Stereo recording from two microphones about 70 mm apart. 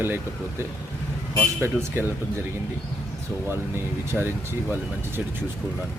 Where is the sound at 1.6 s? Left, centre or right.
Right.